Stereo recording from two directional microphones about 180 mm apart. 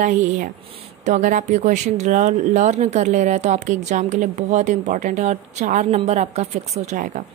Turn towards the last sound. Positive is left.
turn(degrees=-45)  # may be behind; listen again after turning